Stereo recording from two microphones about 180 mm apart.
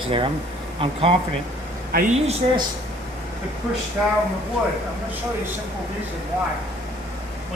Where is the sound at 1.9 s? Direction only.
55° right (ahead or behind).